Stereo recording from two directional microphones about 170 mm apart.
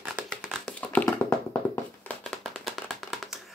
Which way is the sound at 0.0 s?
Centre (ahead or behind).